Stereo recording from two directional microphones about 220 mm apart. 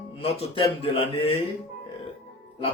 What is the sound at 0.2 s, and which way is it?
A man's voice, 25° left (ahead or behind).